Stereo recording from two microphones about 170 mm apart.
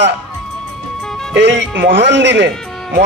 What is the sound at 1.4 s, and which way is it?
A man's voice, 90° right.